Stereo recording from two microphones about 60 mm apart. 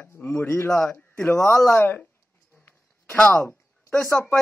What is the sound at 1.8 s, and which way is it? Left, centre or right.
Speech, left.